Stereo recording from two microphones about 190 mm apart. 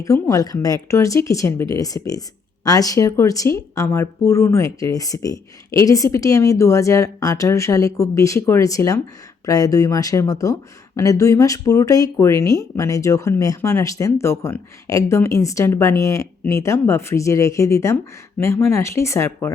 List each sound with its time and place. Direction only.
0.0 s speech: 15° left (ahead or behind)